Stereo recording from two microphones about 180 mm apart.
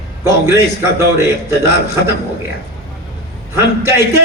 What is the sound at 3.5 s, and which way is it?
Speech, 15° right (ahead or behind).